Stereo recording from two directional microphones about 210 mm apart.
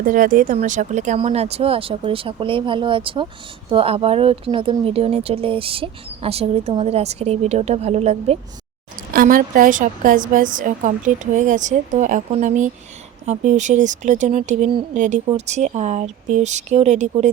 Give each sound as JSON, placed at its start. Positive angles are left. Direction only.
{"t": 0.0, "sound": "speech", "side_deg": -40}
{"t": 9.1, "sound": "a woman's voice", "side_deg": -40}